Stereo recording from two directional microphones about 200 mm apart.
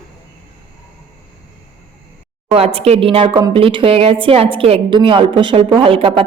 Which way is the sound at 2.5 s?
30° right (ahead or behind).